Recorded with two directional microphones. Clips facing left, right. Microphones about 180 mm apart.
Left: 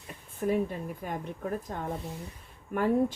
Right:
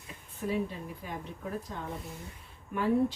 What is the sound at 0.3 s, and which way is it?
Speech, 50° left (ahead or behind).